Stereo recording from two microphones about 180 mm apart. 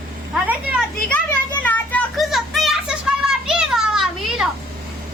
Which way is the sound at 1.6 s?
10° left (ahead or behind).